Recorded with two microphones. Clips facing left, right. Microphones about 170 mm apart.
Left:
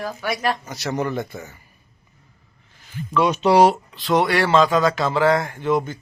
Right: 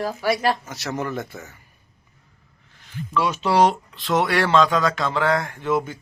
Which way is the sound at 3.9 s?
Centre (ahead or behind).